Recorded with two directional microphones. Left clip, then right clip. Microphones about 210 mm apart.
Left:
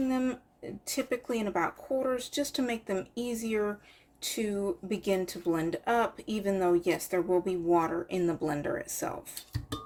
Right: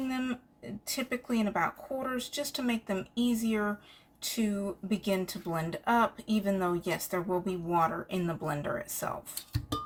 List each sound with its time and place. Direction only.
0.1 s speech: 25° left (ahead or behind)